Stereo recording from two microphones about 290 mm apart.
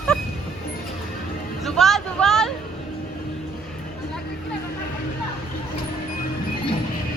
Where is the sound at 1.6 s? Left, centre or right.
Centre.